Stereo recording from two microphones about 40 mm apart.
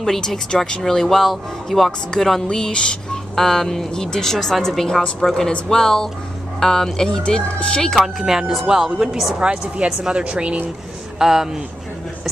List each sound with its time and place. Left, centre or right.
0.0 s speech: centre
1.9 s speech: centre
3.3 s speech: centre
8.0 s speech: centre
9.4 s speech: right
11.1 s speech: centre